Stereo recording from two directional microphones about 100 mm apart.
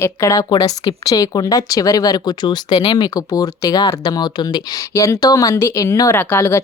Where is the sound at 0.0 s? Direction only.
30° left (ahead or behind).